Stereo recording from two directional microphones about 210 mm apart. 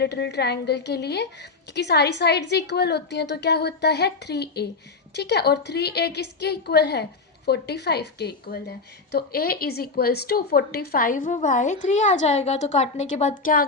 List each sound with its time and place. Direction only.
0.0 s a woman's voice: 55° left (ahead or behind)